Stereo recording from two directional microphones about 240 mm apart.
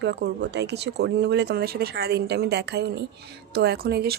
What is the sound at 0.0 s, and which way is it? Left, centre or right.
Speech, right.